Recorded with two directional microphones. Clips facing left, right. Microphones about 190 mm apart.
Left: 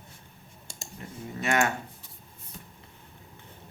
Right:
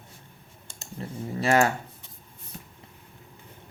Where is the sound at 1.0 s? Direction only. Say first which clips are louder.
Right 6 dB; 35° right (ahead or behind).